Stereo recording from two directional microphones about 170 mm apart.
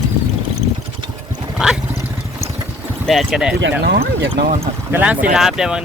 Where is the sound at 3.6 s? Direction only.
75° right (ahead or behind).